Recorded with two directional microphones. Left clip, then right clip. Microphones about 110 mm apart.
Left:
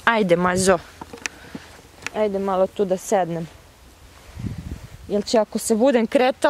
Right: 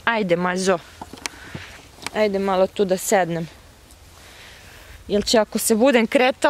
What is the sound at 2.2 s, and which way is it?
Speech, 25° right (ahead or behind).